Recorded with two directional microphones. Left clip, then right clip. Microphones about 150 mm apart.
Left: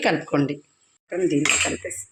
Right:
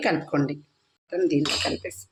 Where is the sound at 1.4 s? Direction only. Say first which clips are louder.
Left 5 dB; 5° right (ahead or behind).